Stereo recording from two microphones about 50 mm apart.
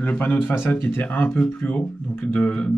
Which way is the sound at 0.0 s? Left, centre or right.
Left.